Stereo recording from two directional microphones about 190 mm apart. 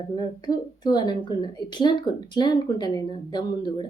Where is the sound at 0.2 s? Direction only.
20° left (ahead or behind).